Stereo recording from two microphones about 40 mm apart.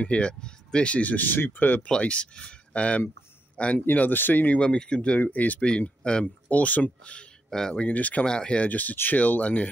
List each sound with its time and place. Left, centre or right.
0.0 s speech: left
1.2 s speech: left
1.9 s speech: left
3.7 s speech: left
4.6 s speech: left
5.2 s speech: left
5.6 s speech: left
6.5 s speech: left
7.4 s speech: centre
7.8 s speech: left
8.3 s speech: left
8.5 s speech: left